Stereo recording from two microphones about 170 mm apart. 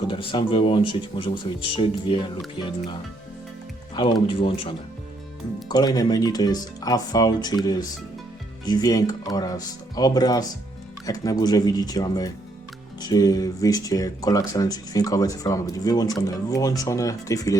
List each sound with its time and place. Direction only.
0.1 s speech: 30° left (ahead or behind)
3.9 s speech: 30° left (ahead or behind)